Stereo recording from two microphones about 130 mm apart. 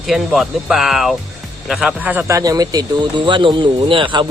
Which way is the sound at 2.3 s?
30° right (ahead or behind).